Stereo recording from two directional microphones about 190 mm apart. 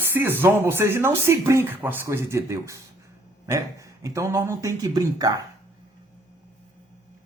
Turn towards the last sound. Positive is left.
turn(degrees=-20)  # may be behind; listen again after turning